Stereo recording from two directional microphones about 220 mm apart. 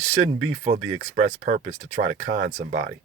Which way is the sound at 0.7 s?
80° right.